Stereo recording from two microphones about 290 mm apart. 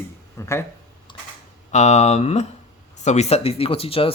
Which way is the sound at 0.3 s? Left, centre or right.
Centre.